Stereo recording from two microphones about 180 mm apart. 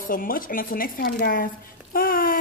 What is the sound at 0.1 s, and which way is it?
Speech, 50° left (ahead or behind).